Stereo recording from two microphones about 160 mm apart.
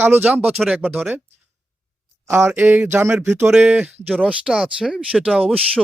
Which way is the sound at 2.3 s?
15° right (ahead or behind).